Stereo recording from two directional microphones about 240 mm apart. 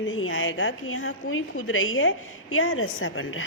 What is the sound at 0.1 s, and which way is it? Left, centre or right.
A woman's voice, left.